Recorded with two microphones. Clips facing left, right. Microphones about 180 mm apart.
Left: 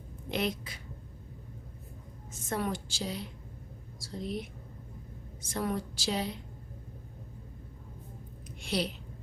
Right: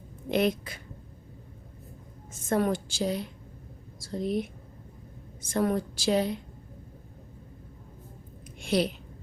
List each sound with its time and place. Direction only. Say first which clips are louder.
0.3 s a woman's voice: right 7 dB; 55° right (ahead or behind)
2.5 s a woman's voice: right 7 dB; 50° right (ahead or behind)
5.5 s a woman's voice: right 7 dB; 50° right (ahead or behind)
8.6 s a sound: right 6 dB; 50° right (ahead or behind)